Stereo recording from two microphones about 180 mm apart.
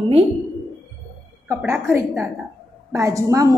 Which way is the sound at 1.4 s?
15° right (ahead or behind).